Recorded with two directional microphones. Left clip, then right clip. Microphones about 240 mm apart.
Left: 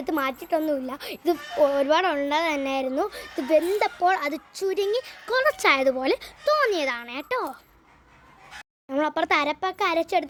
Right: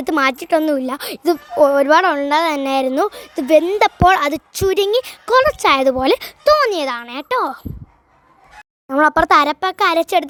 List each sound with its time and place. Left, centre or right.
0.0 s a woman's voice: right
8.9 s a woman's voice: right